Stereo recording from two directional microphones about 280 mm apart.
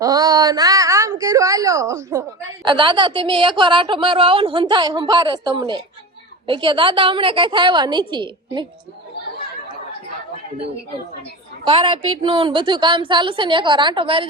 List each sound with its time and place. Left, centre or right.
0.0 s a sound: centre
2.6 s a woman's voice: centre
11.6 s a woman's voice: centre